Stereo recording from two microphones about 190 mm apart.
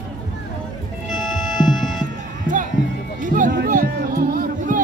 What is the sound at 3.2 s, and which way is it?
Run, 45° right (ahead or behind).